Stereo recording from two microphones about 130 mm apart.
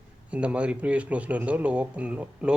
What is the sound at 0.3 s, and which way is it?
Speech, 10° right (ahead or behind).